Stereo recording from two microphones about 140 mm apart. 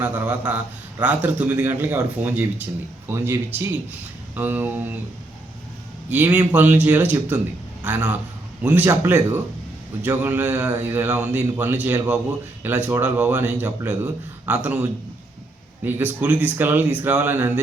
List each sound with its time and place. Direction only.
0.0 s a man's voice: 10° right (ahead or behind)
6.1 s a man's voice: 10° right (ahead or behind)